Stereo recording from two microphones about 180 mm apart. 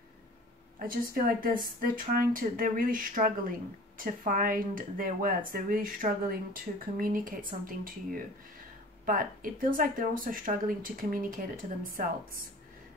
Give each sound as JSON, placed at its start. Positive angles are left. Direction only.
{"t": 0.7, "sound": "a woman's voice", "side_deg": -55}